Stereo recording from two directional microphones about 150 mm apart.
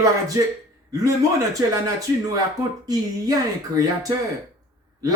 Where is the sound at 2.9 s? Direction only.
25° right (ahead or behind).